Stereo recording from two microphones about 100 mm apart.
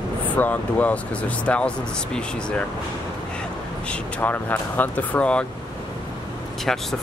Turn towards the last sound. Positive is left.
turn(degrees=5)  # may be behind; listen again after turning